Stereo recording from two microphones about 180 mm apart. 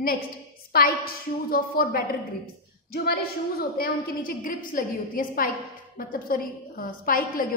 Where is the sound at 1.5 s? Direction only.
55° left (ahead or behind).